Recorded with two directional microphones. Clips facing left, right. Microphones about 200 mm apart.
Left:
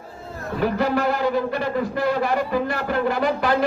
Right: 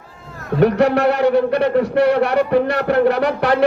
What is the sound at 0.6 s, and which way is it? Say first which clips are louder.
Speech: right 7 dB; 70° right (ahead or behind).